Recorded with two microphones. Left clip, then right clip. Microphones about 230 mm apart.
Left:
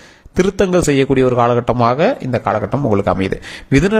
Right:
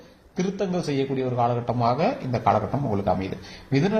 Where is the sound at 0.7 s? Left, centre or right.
Left.